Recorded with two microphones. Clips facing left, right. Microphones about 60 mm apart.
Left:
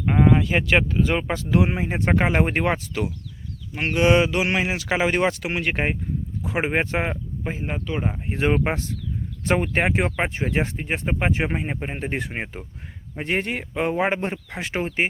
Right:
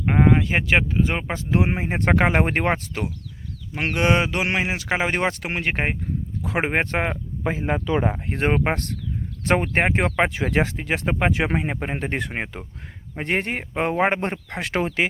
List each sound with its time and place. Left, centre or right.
0.0 s a sound: right
0.3 s speech: right
1.9 s speech: right
3.8 s speech: right
4.0 s speech: right
4.5 s speech: right
6.4 s speech: right
7.4 s speech: right
8.1 s speech: right
14.6 s speech: right